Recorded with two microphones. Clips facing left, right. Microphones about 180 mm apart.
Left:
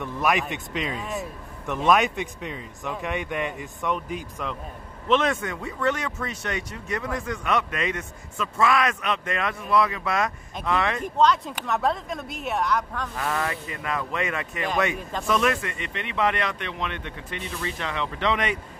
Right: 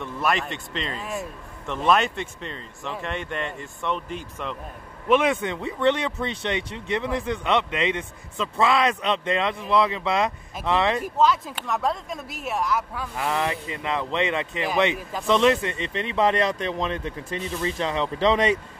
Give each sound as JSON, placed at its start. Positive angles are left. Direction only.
{"t": 0.0, "sound": "a man's voice", "side_deg": 15}
{"t": 0.7, "sound": "speech", "side_deg": 0}
{"t": 1.9, "sound": "a man's voice", "side_deg": 15}
{"t": 5.0, "sound": "speech", "side_deg": -10}
{"t": 5.4, "sound": "speech", "side_deg": -25}
{"t": 11.0, "sound": "speech", "side_deg": 0}